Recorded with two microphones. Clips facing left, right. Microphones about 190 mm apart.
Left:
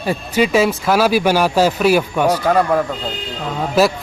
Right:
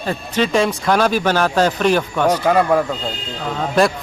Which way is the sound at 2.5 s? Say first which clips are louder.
Even; centre (ahead or behind).